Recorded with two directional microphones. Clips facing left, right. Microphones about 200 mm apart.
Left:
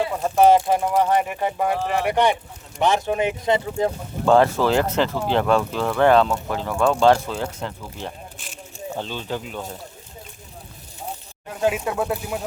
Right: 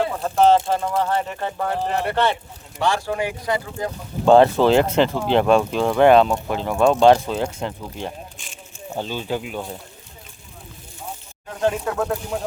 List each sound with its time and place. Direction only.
0.0 s speech: 10° left (ahead or behind)
4.3 s speech: 25° right (ahead or behind)
11.6 s speech: 10° left (ahead or behind)